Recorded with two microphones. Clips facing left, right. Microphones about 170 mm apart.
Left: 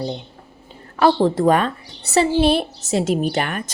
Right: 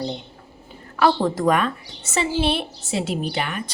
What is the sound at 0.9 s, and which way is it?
A woman's voice, 30° left (ahead or behind).